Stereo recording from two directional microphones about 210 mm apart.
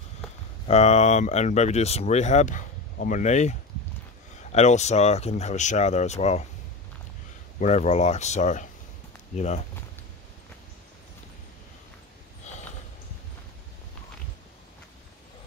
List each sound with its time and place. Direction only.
0.7 s speech: 30° left (ahead or behind)
7.6 s speech: 35° left (ahead or behind)
12.5 s a sound: 35° left (ahead or behind)